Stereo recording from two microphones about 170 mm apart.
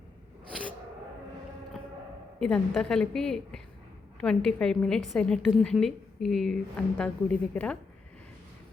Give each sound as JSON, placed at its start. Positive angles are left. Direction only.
{"t": 2.4, "sound": "a woman's voice", "side_deg": 5}